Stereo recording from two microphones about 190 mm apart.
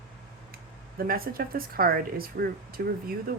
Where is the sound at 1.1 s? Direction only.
50° right (ahead or behind).